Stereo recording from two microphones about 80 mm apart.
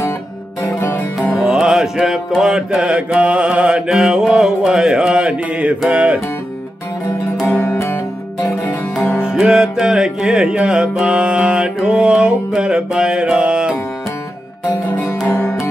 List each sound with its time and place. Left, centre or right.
0.6 s music: left
1.4 s mantra: centre
7.5 s music: left
9.2 s music: centre
15.2 s music: left